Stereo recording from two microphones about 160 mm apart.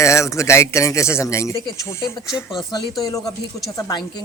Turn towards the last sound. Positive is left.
turn(degrees=20)  # may be behind; listen again after turning